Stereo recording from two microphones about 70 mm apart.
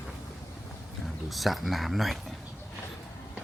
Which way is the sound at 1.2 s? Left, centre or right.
Centre.